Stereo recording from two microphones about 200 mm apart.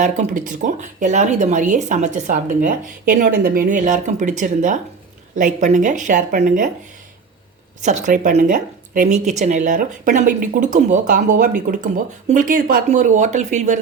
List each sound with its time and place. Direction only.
0.0 s speech: 40° right (ahead or behind)
7.8 s speech: 35° right (ahead or behind)